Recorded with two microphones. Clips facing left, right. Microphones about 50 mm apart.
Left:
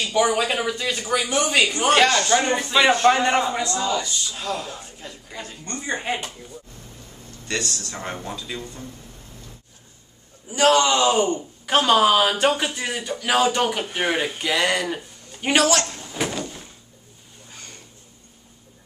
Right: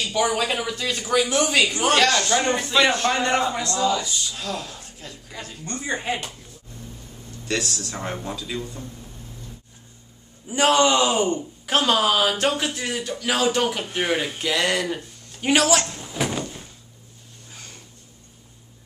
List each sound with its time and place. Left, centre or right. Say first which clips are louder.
0.0 s speech: left 2 dB; centre
7.4 s speech: right 1 dB; centre
10.5 s a man's voice: left 1 dB; centre
11.3 s speech: left 2 dB; centre
16.0 s a sound: right 1 dB; centre
17.5 s a sound: left 1 dB; centre